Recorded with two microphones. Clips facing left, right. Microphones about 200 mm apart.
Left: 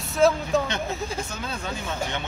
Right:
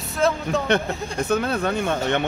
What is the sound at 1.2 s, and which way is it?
Speech, 60° right (ahead or behind).